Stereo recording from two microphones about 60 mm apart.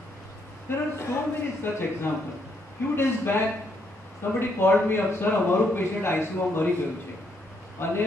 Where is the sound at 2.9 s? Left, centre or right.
Left.